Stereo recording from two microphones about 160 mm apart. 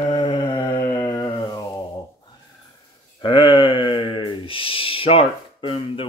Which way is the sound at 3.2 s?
30° left (ahead or behind).